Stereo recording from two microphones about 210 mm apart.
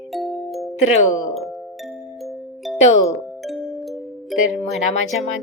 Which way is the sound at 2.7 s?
30° left (ahead or behind).